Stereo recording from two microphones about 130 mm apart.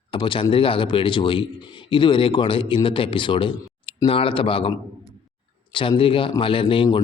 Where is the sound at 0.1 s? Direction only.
40° left (ahead or behind).